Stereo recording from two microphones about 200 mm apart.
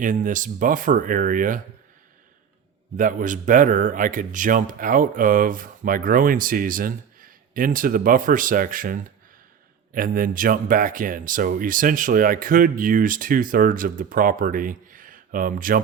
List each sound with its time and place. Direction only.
0.0 s speech: 40° right (ahead or behind)
2.9 s speech: 40° right (ahead or behind)